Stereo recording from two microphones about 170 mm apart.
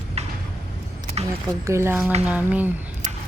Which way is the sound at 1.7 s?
15° right (ahead or behind).